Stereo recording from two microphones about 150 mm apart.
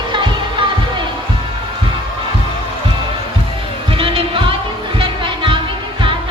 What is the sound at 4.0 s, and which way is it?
Music, 35° right (ahead or behind).